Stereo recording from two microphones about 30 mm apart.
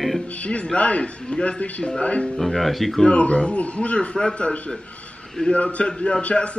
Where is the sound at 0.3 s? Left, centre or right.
Left.